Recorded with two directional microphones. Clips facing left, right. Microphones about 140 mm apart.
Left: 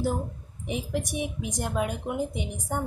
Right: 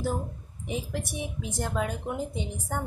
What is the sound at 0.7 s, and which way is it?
A woman's voice, 15° left (ahead or behind).